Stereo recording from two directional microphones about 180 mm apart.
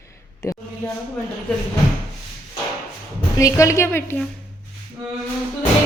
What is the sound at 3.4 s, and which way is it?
Speech, 15° left (ahead or behind).